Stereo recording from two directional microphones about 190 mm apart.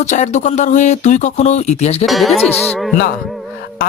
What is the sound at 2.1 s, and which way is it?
Music, centre (ahead or behind).